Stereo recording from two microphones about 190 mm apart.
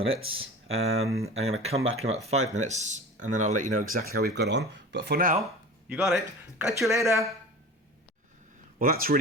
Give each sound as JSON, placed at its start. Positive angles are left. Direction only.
{"t": 0.0, "sound": "speech", "side_deg": -30}
{"t": 5.9, "sound": "speech", "side_deg": -5}
{"t": 8.8, "sound": "speech", "side_deg": -50}